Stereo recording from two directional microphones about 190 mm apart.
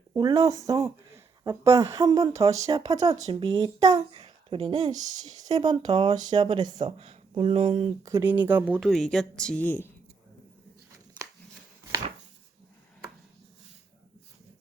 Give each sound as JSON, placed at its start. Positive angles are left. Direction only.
{"t": 0.1, "sound": "speech", "side_deg": -20}
{"t": 8.0, "sound": "speech", "side_deg": -15}